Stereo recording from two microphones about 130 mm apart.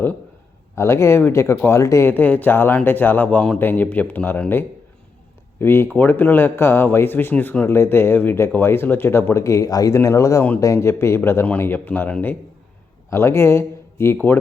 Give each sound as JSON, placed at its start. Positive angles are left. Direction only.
{"t": 0.8, "sound": "speech", "side_deg": 20}